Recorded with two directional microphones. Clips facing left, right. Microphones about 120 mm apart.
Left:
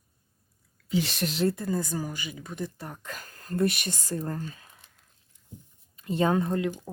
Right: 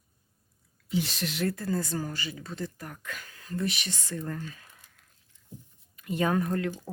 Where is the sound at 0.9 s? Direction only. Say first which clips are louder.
Left 2 dB; 80° left.